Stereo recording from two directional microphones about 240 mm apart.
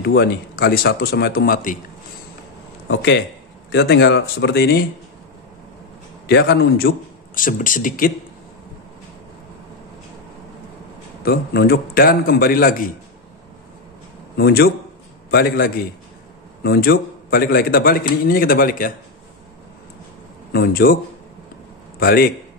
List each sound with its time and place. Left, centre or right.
0.0 s a man's voice: left
2.9 s speech: left
6.2 s a man's voice: left
11.2 s a man's voice: left
14.3 s a man's voice: left
20.5 s a man's voice: left
22.0 s a man's voice: left